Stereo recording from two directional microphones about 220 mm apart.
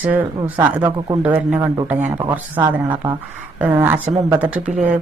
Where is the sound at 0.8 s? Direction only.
20° right (ahead or behind).